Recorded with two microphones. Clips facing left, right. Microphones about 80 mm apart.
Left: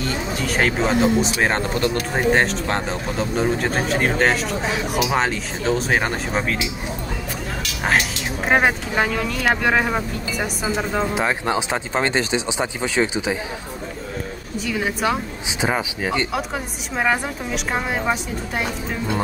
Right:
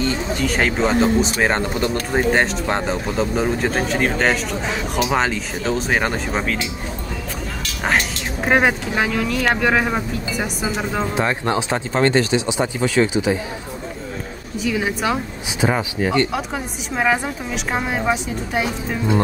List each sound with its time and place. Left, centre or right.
0.0 s speech: centre
8.5 s speech: centre
11.1 s speech: centre
14.6 s speech: centre